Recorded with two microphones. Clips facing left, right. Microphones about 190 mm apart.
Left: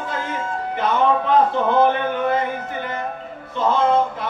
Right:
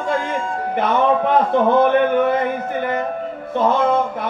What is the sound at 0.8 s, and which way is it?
Speech, 55° right (ahead or behind).